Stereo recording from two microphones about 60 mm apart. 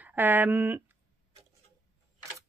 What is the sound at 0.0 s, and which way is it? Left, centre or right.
Speech, right.